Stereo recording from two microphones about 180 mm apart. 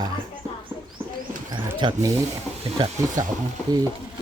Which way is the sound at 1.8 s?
20° right (ahead or behind).